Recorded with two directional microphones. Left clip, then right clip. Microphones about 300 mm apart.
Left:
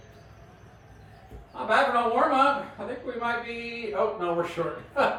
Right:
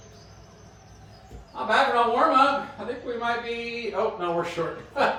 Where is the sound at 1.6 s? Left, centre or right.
Centre.